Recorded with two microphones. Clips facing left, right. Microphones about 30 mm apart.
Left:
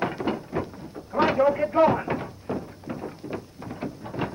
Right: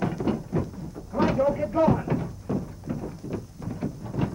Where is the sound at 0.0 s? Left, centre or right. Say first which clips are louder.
Even; left.